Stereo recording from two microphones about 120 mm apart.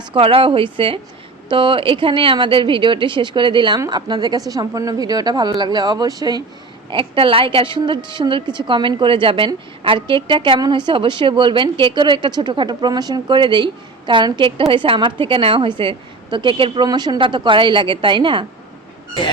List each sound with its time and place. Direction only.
0.1 s a woman's voice: 50° right (ahead or behind); by 6.4 s 35° right (ahead or behind)
6.9 s a woman's voice: 50° right (ahead or behind)